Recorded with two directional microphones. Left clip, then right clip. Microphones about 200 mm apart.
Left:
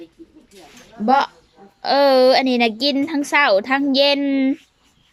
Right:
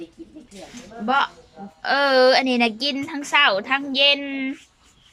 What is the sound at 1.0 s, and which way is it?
A woman's voice, 25° left (ahead or behind).